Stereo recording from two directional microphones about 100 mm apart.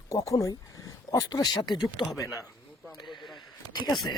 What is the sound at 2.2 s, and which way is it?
Speech, 35° left (ahead or behind).